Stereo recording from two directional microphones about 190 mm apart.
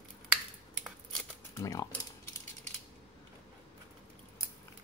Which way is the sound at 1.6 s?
15° left (ahead or behind).